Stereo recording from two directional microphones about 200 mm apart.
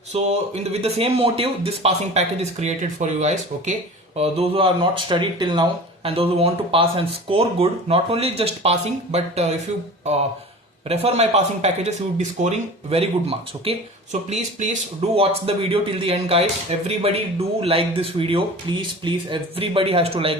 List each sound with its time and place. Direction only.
0.1 s speech: 30° right (ahead or behind)
10.8 s speech: 30° right (ahead or behind)